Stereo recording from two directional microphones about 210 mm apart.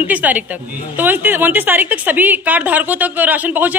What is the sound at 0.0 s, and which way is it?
A woman's voice, 5° right (ahead or behind).